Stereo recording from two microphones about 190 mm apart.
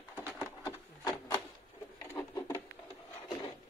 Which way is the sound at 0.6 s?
20° left (ahead or behind).